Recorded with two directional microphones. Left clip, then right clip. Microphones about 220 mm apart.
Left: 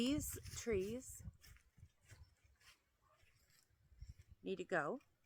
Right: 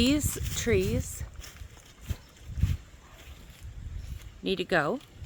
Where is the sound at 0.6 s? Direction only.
10° left (ahead or behind).